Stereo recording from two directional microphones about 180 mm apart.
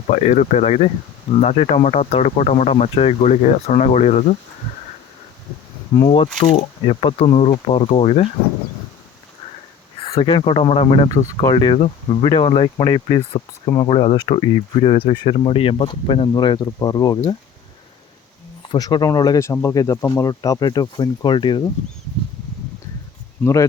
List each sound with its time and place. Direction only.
0.1 s speech: 40° left (ahead or behind)
6.1 s speech: 30° left (ahead or behind)
10.1 s speech: 30° left (ahead or behind)
18.7 s speech: 25° left (ahead or behind)
23.4 s speech: 15° left (ahead or behind)